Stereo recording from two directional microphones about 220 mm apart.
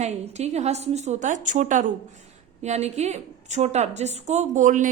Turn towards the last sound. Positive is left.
turn(degrees=-35)  # may be behind; listen again after turning